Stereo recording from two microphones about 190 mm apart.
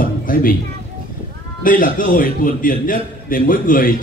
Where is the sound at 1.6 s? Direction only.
45° left (ahead or behind).